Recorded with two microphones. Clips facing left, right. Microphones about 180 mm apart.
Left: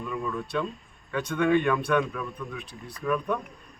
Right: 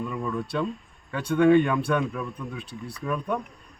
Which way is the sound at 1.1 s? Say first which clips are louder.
Right 5 dB; 30° right (ahead or behind).